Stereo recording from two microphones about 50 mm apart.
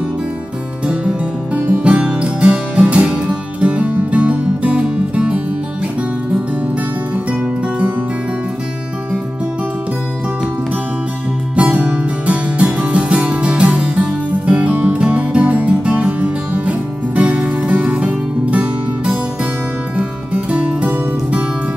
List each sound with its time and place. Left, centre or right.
0.8 s music: right
11.5 s music: right